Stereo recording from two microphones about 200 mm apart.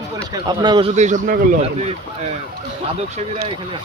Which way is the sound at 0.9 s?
35° right (ahead or behind).